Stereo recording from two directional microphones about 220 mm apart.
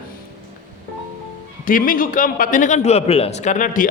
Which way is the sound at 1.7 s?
40° left (ahead or behind).